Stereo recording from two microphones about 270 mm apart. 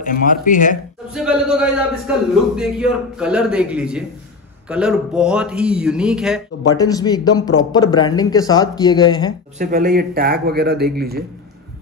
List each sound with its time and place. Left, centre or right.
0.0 s speech: left
1.0 s a man's voice: centre
6.7 s speech: centre
9.6 s a man's voice: right